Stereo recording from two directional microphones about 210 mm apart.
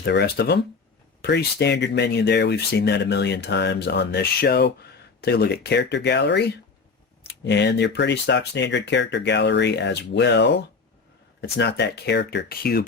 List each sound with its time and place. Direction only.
0.0 s speech: 50° left (ahead or behind)